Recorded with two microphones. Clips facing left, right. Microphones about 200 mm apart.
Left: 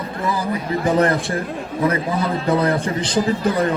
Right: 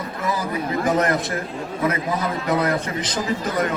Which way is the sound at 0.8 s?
30° left (ahead or behind).